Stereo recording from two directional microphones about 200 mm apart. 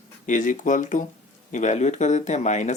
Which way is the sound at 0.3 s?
40° left (ahead or behind).